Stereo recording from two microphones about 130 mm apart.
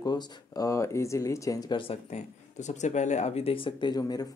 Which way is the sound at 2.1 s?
65° left (ahead or behind).